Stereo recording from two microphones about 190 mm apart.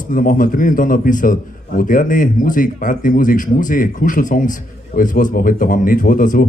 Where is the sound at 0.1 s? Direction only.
45° left (ahead or behind).